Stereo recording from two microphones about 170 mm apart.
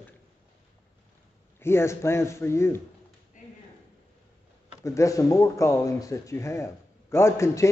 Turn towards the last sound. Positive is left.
turn(degrees=15)  # may be behind; listen again after turning